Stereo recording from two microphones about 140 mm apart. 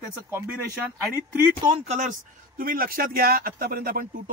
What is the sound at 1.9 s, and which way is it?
Speech, 65° right (ahead or behind).